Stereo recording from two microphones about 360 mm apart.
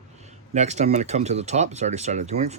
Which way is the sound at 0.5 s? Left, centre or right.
Centre.